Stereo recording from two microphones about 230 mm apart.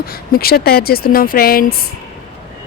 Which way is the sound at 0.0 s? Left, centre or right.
Left.